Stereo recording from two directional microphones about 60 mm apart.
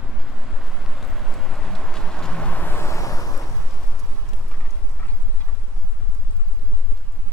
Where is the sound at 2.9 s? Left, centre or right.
Left.